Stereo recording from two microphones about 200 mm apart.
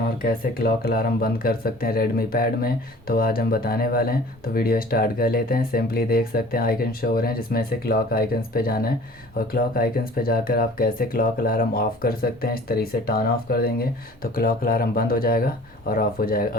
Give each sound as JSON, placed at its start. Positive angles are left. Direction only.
{"t": 0.2, "sound": "speech", "side_deg": 45}